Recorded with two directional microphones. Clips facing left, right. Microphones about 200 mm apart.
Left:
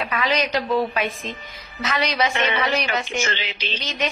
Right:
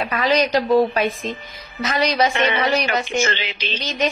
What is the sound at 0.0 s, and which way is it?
A woman's voice, 35° right (ahead or behind).